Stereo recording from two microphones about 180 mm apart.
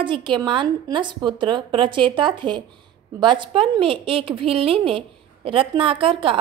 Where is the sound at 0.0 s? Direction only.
25° right (ahead or behind).